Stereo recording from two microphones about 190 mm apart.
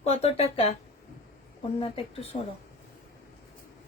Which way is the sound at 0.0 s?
35° left (ahead or behind).